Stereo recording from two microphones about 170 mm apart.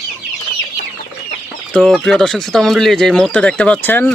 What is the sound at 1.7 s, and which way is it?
Speech, 5° left (ahead or behind).